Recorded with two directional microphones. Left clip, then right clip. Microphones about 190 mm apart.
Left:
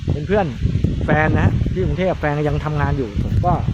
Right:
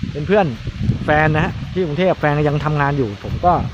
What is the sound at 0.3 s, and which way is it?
Speech, 25° right (ahead or behind).